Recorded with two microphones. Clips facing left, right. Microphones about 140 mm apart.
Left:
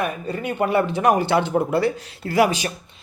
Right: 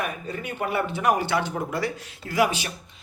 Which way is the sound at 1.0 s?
30° left (ahead or behind).